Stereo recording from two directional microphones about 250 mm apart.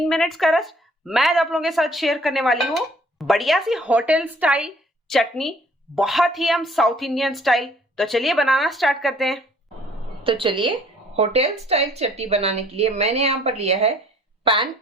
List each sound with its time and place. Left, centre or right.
0.0 s a woman's voice: centre
10.2 s a woman's voice: centre